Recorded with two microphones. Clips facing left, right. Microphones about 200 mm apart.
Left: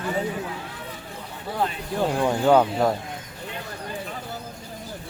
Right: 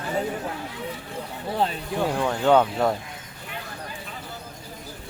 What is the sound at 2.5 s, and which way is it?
Speech, 5° left (ahead or behind).